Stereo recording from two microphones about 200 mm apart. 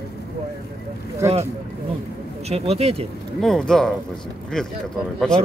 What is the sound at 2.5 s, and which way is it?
Speech, 30° right (ahead or behind).